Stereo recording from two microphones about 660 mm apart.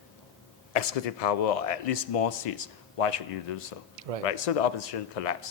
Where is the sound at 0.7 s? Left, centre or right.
Left.